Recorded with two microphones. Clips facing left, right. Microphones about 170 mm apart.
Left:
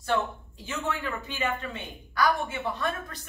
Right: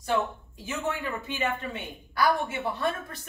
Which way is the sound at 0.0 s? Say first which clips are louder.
Even; 15° right (ahead or behind).